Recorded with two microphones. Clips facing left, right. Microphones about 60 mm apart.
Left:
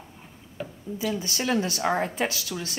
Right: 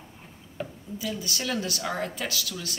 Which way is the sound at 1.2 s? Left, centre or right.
Left.